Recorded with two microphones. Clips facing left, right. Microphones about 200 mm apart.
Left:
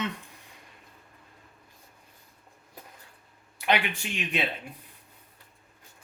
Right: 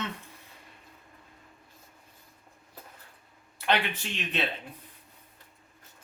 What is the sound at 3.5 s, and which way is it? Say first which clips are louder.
Speech: left 1 dB; 15° left (ahead or behind).